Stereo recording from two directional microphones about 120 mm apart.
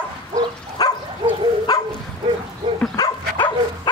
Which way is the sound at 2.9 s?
35° left (ahead or behind).